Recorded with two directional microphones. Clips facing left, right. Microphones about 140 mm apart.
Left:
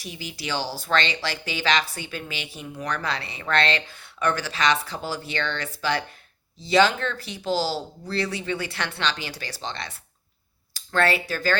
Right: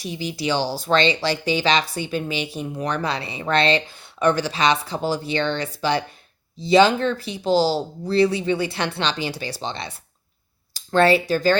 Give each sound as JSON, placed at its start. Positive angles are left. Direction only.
{"t": 0.0, "sound": "speech", "side_deg": -25}
{"t": 3.1, "sound": "speech", "side_deg": -15}